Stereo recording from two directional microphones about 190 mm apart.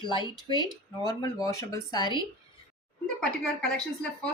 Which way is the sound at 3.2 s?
5° left (ahead or behind).